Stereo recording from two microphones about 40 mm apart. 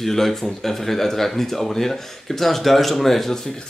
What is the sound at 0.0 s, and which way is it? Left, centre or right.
Speech, centre.